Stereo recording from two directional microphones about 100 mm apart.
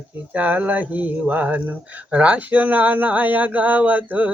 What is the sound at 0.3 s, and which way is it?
Speech, 15° right (ahead or behind).